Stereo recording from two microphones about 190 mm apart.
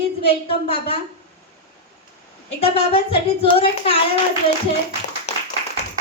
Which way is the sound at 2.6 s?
30° left (ahead or behind).